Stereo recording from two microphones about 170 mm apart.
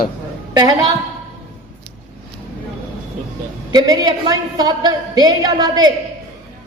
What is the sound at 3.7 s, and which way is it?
A woman's voice, 20° right (ahead or behind).